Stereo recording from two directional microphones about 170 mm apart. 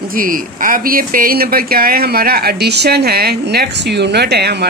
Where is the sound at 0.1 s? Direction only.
55° right (ahead or behind).